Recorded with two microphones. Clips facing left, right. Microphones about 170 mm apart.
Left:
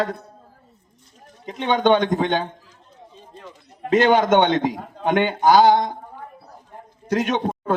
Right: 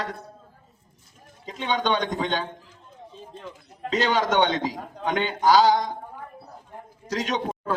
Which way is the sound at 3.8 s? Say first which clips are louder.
Left 7 dB; 55° left (ahead or behind).